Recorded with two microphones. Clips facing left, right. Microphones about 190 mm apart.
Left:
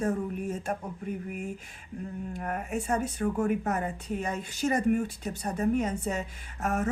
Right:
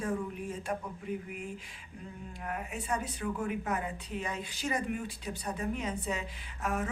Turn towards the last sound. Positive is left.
turn(degrees=45)  # may be behind; listen again after turning